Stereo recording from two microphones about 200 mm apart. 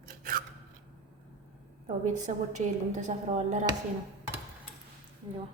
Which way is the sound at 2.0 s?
35° right (ahead or behind).